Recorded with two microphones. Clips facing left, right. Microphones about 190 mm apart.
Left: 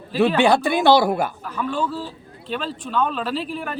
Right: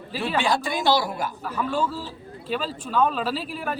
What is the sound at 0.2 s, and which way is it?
Speech, 60° left (ahead or behind).